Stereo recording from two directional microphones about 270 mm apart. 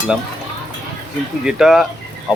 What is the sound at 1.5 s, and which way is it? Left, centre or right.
Speech, centre.